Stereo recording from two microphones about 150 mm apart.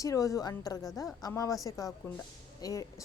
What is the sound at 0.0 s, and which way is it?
A woman's voice, 20° left (ahead or behind).